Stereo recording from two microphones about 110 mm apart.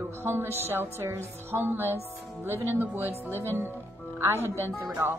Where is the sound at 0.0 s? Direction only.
20° right (ahead or behind).